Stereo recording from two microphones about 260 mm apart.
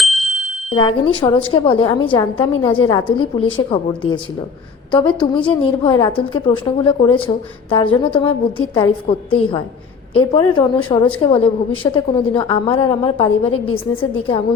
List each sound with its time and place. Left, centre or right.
0.0 s bicycle bell: centre
0.7 s a woman's voice: left